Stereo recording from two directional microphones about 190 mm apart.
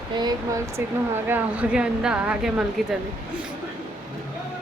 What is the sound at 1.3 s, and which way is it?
Speech, 10° right (ahead or behind).